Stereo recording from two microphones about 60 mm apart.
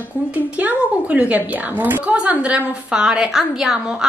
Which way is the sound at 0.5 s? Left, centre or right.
Right.